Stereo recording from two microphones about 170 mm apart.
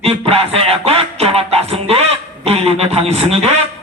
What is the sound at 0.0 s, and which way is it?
Music, 35° right (ahead or behind).